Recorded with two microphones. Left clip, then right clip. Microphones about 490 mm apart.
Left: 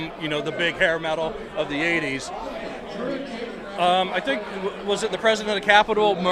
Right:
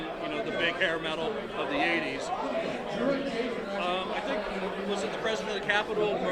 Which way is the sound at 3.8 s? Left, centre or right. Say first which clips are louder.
Left 13 dB; left.